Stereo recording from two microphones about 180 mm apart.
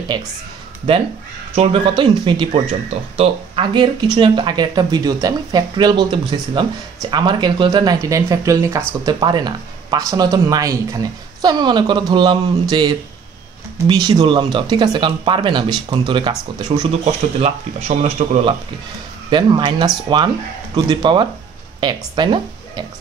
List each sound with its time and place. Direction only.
0.1 s speech: 25° right (ahead or behind)
1.5 s speech: 30° right (ahead or behind)
17.0 s speech: 35° right (ahead or behind)